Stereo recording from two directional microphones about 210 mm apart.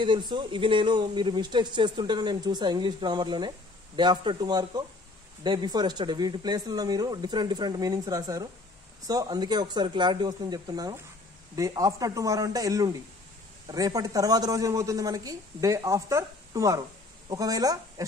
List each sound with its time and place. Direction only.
0.0 s a man's voice: 20° right (ahead or behind)